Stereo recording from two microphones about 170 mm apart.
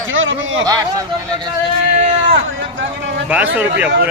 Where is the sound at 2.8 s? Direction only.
90° right.